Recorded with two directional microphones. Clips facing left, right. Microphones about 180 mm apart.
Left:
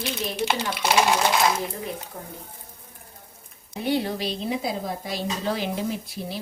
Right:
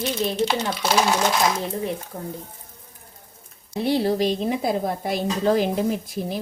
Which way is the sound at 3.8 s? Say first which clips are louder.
Right 5 dB; 35° right (ahead or behind).